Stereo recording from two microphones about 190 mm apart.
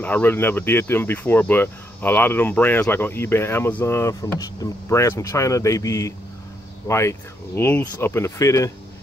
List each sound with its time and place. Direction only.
0.0 s speech: 10° left (ahead or behind)